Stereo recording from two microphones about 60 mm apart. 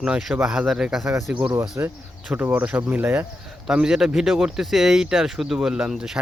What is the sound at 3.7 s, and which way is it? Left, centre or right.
A man's voice, centre.